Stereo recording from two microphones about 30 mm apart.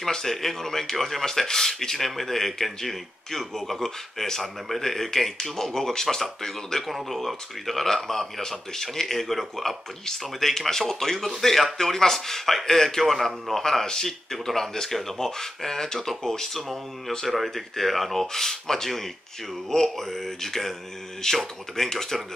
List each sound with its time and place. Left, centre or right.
0.1 s a man's voice: centre
7.1 s a man's voice: centre
17.3 s a man's voice: centre